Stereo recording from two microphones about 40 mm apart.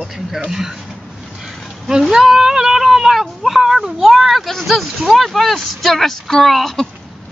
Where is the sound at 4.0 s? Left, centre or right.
Centre.